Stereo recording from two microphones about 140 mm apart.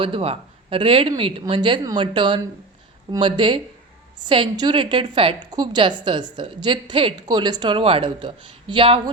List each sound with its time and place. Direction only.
0.0 s a woman's voice: 40° right (ahead or behind)